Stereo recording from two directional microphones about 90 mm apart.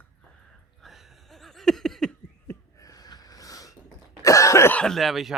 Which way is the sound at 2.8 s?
45° left (ahead or behind).